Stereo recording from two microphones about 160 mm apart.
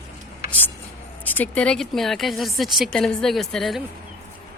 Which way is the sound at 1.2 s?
10° left (ahead or behind).